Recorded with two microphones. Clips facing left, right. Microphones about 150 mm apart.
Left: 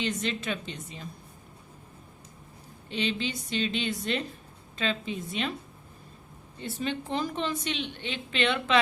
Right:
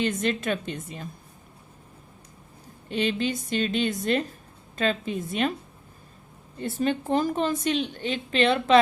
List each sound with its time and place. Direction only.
0.0 s a woman's voice: 50° right (ahead or behind)
2.9 s a woman's voice: 50° right (ahead or behind)
6.6 s a woman's voice: 50° right (ahead or behind)